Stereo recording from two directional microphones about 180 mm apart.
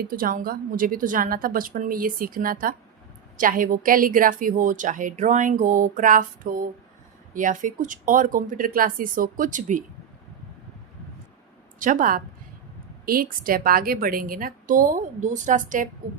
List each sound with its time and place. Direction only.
0.1 s a woman's voice: 50° right (ahead or behind)
11.8 s a woman's voice: 45° right (ahead or behind)